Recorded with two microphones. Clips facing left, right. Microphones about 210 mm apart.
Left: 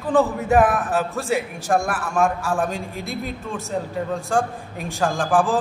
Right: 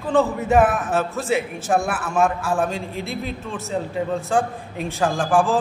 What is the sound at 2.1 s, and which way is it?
Speech, centre (ahead or behind).